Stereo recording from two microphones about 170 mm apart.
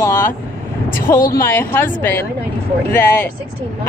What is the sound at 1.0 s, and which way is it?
Speech, 55° left (ahead or behind).